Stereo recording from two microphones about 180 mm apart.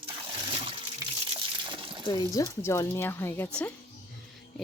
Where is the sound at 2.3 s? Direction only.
20° left (ahead or behind).